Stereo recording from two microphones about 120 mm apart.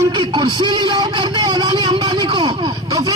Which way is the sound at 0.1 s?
40° right (ahead or behind).